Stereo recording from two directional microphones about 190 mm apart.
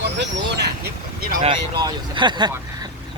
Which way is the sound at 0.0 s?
65° right (ahead or behind).